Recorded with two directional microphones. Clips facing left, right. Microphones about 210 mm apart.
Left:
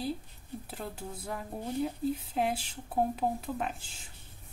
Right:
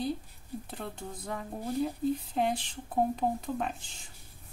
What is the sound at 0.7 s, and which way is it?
Speech, 5° left (ahead or behind).